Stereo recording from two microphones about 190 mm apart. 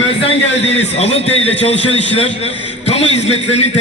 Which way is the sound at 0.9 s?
35° left (ahead or behind).